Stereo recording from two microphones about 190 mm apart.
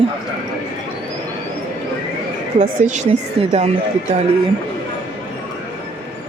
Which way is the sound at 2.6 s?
40° right (ahead or behind).